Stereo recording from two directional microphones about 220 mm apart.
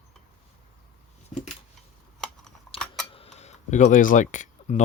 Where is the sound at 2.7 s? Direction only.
5° left (ahead or behind).